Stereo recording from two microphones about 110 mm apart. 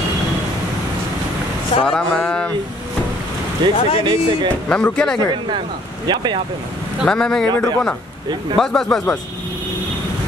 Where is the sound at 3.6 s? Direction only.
40° right (ahead or behind).